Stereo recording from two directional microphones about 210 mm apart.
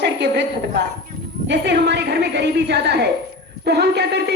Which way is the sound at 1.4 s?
55° right (ahead or behind).